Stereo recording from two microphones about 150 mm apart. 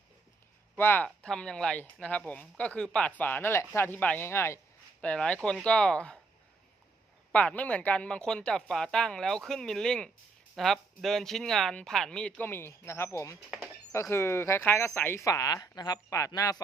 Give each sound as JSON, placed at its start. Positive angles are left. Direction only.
{"t": 0.8, "sound": "speech", "side_deg": 15}
{"t": 4.9, "sound": "speech", "side_deg": 5}
{"t": 7.3, "sound": "speech", "side_deg": 10}